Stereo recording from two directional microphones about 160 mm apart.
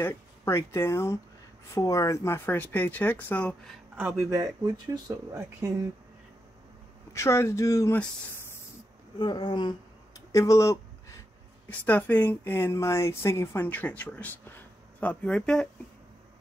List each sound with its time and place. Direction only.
0.0 s speech: 15° left (ahead or behind)
3.9 s speech: 10° right (ahead or behind)
7.1 s speech: 15° left (ahead or behind)
9.2 s a sound: 25° left (ahead or behind)
11.7 s speech: 10° left (ahead or behind)